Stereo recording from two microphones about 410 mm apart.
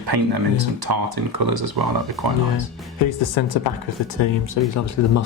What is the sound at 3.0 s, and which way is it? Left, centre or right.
Speech, left.